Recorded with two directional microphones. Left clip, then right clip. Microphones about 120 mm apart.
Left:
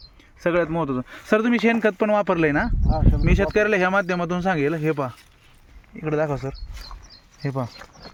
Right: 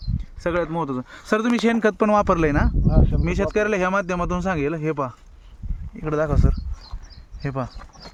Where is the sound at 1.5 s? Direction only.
5° right (ahead or behind).